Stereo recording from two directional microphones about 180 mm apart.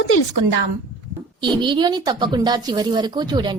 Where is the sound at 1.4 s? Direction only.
25° right (ahead or behind).